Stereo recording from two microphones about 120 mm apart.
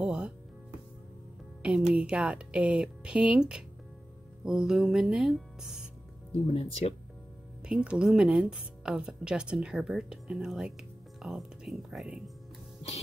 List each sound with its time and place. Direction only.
0.0 s music: 5° right (ahead or behind)
2.0 s speech: 10° right (ahead or behind)
6.3 s speech: 60° left (ahead or behind)
7.6 s speech: 10° right (ahead or behind)